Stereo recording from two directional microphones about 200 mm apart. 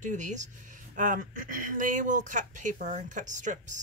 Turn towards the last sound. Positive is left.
turn(degrees=-40)  # may be behind; listen again after turning